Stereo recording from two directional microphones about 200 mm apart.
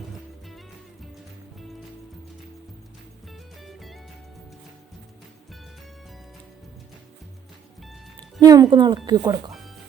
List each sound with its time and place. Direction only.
3.6 s music: centre (ahead or behind)
8.4 s speech: 20° right (ahead or behind)